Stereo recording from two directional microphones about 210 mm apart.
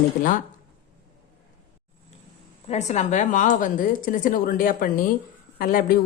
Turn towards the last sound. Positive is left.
turn(degrees=45)  # may be behind; listen again after turning